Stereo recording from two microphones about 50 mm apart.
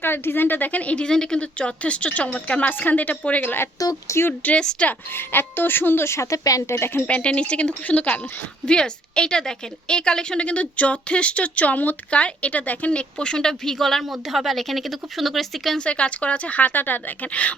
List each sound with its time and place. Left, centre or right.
0.0 s a woman's voice: left
1.0 s a woman's voice: centre; by 3.5 s left
4.1 s speech: left
4.4 s a woman's voice: left
4.8 s speech: centre
5.1 s speech: left
6.1 s speech: left
7.1 s a woman's voice: left
8.6 s a woman's voice: centre
15.8 s a woman's voice: left